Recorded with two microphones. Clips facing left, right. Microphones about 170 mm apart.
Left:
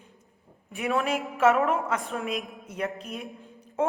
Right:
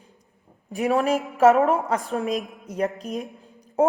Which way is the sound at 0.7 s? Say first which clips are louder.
Right 6 dB; 40° right (ahead or behind).